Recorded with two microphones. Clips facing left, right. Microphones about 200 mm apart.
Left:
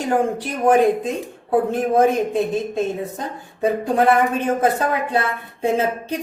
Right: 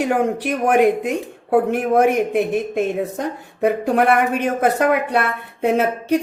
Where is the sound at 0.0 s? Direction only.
75° right (ahead or behind).